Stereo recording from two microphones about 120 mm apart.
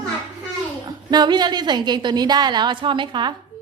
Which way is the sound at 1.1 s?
35° right (ahead or behind).